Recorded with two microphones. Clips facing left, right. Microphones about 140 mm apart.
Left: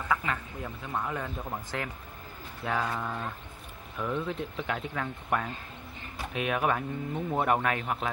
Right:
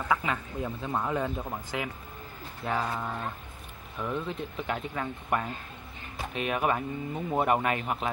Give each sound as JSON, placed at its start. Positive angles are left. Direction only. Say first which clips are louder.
{"t": 0.1, "sound": "speech", "louder": "right 1 dB", "side_deg": -20}
{"t": 1.5, "sound": "speech", "louder": "right 1 dB", "side_deg": 0}